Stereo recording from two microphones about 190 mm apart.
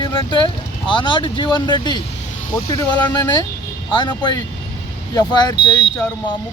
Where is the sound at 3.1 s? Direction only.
20° left (ahead or behind).